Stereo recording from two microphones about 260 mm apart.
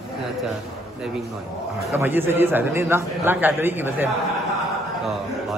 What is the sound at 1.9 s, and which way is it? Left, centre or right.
A man's voice, centre.